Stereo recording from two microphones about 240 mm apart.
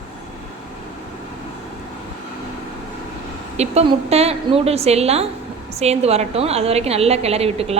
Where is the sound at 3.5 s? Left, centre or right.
Right.